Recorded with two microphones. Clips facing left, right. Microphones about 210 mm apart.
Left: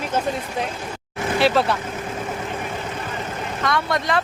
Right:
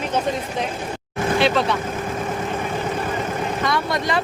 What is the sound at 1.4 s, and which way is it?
Speech, 5° left (ahead or behind).